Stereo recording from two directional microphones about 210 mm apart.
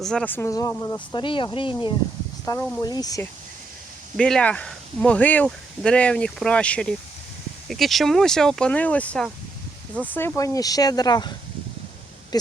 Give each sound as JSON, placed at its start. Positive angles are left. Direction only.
{"t": 0.0, "sound": "speech", "side_deg": 5}
{"t": 2.4, "sound": "speech", "side_deg": 10}
{"t": 4.2, "sound": "speech", "side_deg": 5}